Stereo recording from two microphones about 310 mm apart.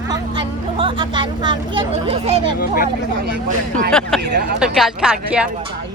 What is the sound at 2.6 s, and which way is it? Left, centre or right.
Speech, left.